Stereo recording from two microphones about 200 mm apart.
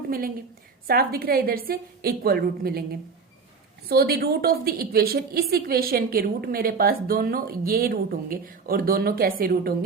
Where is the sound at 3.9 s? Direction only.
50° right (ahead or behind).